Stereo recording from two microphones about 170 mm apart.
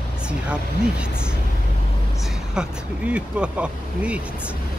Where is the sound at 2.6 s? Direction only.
5° right (ahead or behind).